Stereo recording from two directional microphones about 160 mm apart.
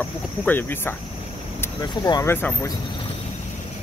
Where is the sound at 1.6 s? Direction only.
25° left (ahead or behind).